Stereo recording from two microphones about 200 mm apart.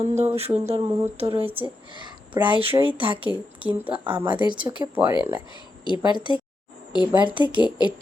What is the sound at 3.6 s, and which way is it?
Speech, 10° right (ahead or behind).